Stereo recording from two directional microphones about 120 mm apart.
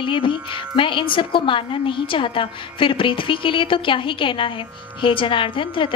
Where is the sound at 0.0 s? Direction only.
45° left (ahead or behind).